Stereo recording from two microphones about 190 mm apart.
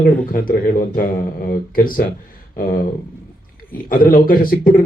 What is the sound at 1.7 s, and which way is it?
Speech, 50° left (ahead or behind).